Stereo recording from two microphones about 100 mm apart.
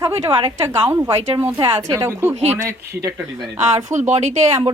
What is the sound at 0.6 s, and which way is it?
Speech, 25° right (ahead or behind).